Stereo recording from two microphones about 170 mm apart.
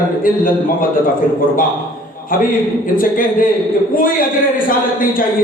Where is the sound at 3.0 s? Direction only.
55° left (ahead or behind).